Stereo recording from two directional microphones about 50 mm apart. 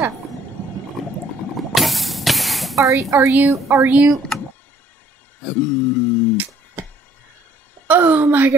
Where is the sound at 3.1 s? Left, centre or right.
Right.